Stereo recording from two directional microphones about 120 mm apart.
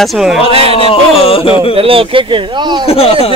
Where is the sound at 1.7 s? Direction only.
50° right (ahead or behind).